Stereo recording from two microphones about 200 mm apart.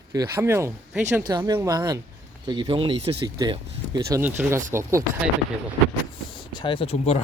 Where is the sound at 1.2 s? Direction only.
20° right (ahead or behind).